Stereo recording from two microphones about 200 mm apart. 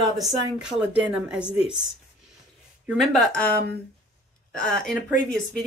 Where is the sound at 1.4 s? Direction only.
30° left (ahead or behind).